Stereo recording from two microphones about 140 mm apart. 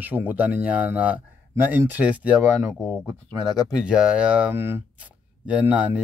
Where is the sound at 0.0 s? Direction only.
10° right (ahead or behind).